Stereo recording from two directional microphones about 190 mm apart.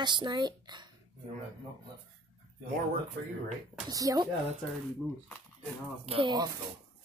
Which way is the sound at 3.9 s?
20° right (ahead or behind).